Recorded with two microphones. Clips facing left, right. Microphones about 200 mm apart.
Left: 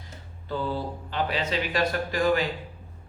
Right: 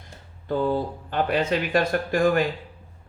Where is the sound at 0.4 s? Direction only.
50° right (ahead or behind).